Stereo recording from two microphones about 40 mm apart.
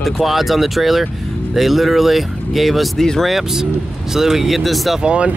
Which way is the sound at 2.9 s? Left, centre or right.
Centre.